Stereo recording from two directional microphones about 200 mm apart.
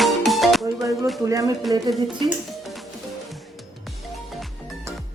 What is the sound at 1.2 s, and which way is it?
Speech, 15° right (ahead or behind).